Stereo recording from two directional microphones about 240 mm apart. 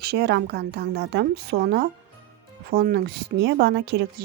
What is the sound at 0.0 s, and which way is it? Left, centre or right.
A woman's voice, right.